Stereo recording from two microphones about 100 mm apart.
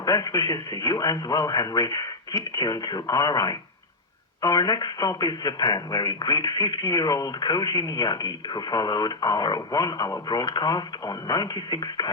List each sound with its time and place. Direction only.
0.0 s speech: 40° left (ahead or behind)